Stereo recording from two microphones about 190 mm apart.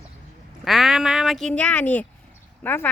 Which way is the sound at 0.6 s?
Centre (ahead or behind).